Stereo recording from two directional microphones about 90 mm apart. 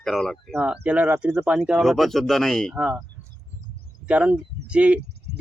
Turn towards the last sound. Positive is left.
turn(degrees=-15)  # may be behind; listen again after turning